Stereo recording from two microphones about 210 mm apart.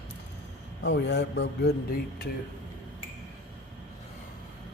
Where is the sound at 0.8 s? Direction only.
55° left (ahead or behind).